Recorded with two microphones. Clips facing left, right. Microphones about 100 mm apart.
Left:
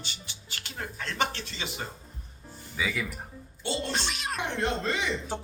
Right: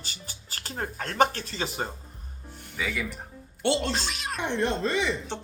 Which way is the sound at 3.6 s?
70° right (ahead or behind).